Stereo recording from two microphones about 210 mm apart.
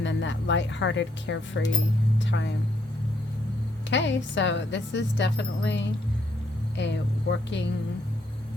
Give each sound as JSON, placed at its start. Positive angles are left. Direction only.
{"t": 0.0, "sound": "speech", "side_deg": 60}
{"t": 2.1, "sound": "music", "side_deg": 60}
{"t": 3.8, "sound": "a woman's voice", "side_deg": 60}